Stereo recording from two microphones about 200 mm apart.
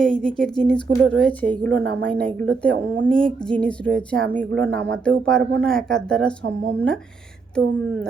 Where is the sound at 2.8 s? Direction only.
65° right (ahead or behind).